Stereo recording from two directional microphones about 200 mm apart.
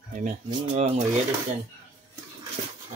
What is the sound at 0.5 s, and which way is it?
Speech, 35° right (ahead or behind).